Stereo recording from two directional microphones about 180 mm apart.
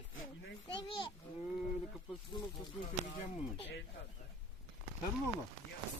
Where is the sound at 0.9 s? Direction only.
30° left (ahead or behind).